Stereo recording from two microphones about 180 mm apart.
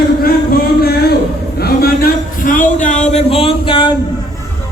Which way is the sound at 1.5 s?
60° left (ahead or behind).